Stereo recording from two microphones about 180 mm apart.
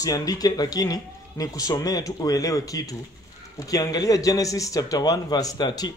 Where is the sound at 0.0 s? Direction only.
20° left (ahead or behind).